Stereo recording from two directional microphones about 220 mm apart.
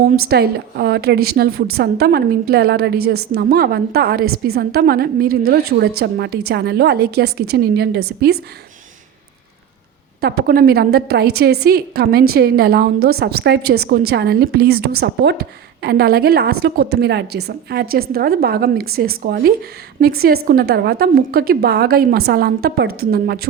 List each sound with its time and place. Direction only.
0.0 s a woman's voice: 40° right (ahead or behind)
10.4 s a woman's voice: 45° right (ahead or behind)